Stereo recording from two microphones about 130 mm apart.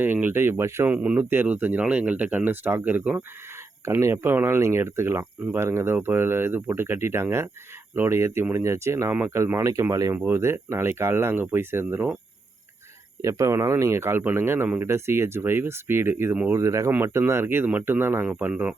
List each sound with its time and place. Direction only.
0.0 s speech: 15° right (ahead or behind)
13.2 s speech: 25° right (ahead or behind)